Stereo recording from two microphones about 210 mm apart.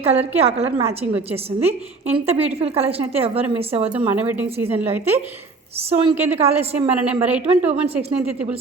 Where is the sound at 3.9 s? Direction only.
10° right (ahead or behind).